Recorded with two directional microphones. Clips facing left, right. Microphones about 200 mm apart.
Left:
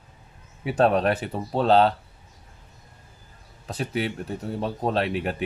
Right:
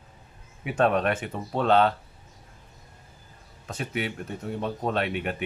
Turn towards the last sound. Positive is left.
turn(degrees=35)  # may be behind; listen again after turning